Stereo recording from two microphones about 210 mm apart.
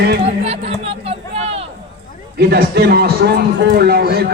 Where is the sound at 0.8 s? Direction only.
25° right (ahead or behind).